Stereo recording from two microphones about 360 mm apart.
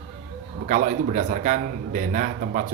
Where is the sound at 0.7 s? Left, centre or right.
Right.